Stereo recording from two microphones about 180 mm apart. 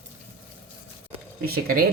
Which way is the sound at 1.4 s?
55° right (ahead or behind).